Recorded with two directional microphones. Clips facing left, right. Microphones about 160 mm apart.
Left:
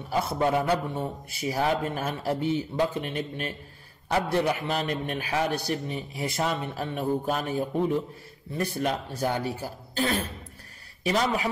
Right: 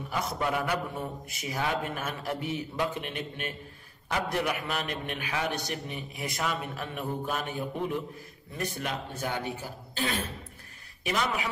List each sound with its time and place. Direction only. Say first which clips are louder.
0.1 s a man's voice: left 6 dB; 30° left (ahead or behind)